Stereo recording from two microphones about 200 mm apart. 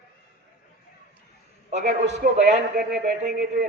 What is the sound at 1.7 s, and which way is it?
Speech, 35° right (ahead or behind).